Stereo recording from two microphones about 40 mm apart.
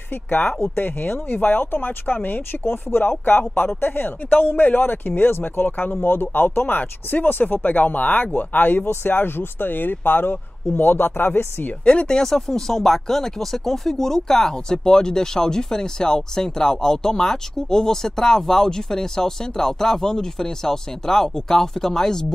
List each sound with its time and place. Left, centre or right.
0.1 s speech: left
11.8 s speech: left
12.1 s speech: centre